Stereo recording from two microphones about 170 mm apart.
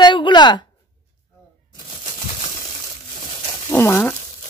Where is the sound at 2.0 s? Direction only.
50° left (ahead or behind).